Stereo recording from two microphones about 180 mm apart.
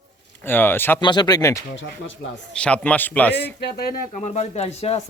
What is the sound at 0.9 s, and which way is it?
Speech, 25° left (ahead or behind).